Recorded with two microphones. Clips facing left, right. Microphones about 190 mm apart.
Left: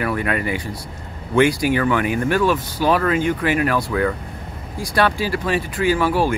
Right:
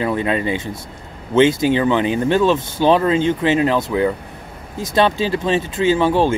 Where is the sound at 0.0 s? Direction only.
25° right (ahead or behind).